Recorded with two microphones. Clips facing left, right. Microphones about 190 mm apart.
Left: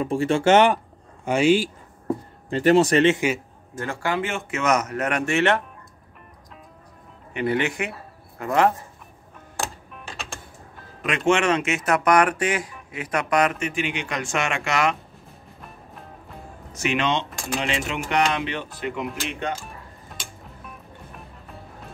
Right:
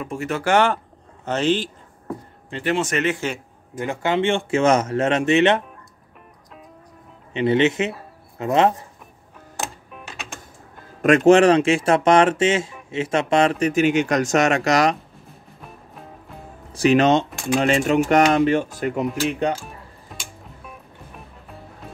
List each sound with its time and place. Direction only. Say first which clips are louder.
0.0 s speech: left 5 dB; 30° left (ahead or behind)
1.2 s speech: left 2 dB; 10° left (ahead or behind)
2.5 s speech: left 6 dB; 40° left (ahead or behind)
3.7 s speech: right 4 dB; 20° right (ahead or behind)
7.3 s speech: right 6 dB; 20° right (ahead or behind)
9.6 s music: even; centre (ahead or behind)
11.0 s speech: right 9 dB; 45° right (ahead or behind)
15.6 s music: right 2 dB; centre (ahead or behind)
16.7 s speech: right 8 dB; 35° right (ahead or behind)
20.1 s music: right 2 dB; centre (ahead or behind)